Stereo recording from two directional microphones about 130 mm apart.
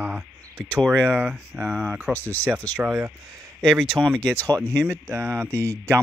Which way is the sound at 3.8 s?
5° left (ahead or behind).